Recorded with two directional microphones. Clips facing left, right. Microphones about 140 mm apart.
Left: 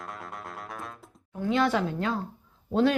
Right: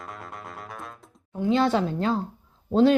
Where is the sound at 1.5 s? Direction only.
25° right (ahead or behind).